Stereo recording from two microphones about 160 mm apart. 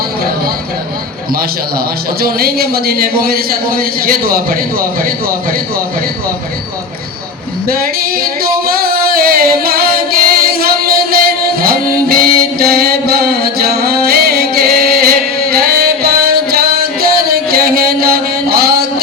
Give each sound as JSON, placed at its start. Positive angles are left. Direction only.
{"t": 2.2, "sound": "a man's voice", "side_deg": -70}
{"t": 7.7, "sound": "singing", "side_deg": -70}
{"t": 15.0, "sound": "music", "side_deg": -70}